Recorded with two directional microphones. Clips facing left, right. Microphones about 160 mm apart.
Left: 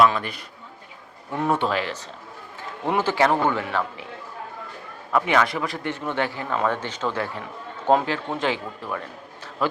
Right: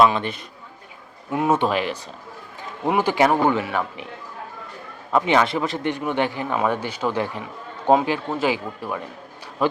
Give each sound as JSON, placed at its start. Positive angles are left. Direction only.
{"t": 0.0, "sound": "a man's voice", "side_deg": -25}
{"t": 1.5, "sound": "a man's voice", "side_deg": -15}
{"t": 5.1, "sound": "a man's voice", "side_deg": -25}